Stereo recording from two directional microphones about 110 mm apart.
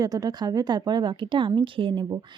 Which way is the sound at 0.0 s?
35° right (ahead or behind).